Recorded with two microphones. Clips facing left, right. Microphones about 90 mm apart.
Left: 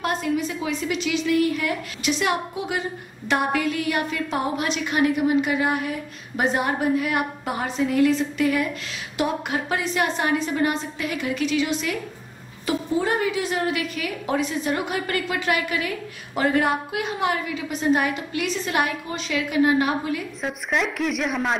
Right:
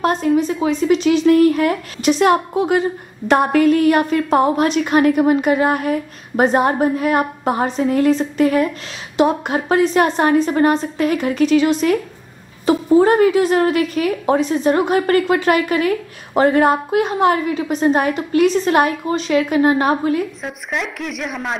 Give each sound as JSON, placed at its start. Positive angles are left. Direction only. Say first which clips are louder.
{"t": 0.0, "sound": "a woman's voice", "louder": "right 8 dB", "side_deg": -40}
{"t": 20.4, "sound": "speech", "louder": "even", "side_deg": 0}